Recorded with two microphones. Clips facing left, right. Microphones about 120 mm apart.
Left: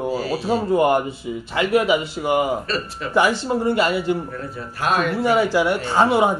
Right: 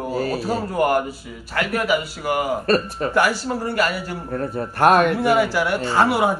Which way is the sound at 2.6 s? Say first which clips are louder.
Right 7 dB; 55° right (ahead or behind).